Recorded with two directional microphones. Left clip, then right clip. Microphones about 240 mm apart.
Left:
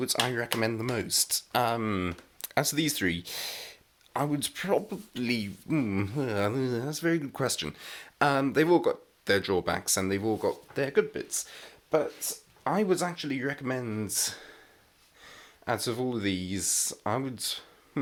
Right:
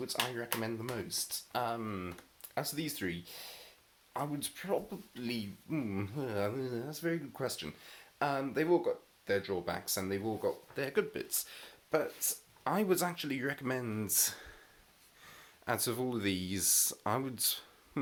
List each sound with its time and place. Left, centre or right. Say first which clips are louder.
0.0 s speech: left 8 dB; left
10.8 s speech: left 9 dB; centre